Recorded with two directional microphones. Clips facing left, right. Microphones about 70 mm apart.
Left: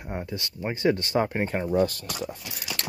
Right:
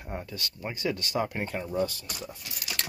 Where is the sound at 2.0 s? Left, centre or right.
Left.